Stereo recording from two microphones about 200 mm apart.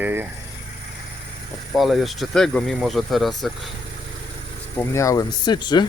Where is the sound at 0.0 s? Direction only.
10° right (ahead or behind).